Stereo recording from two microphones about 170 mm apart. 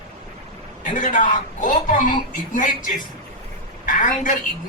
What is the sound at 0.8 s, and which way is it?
A man's voice, 50° left (ahead or behind).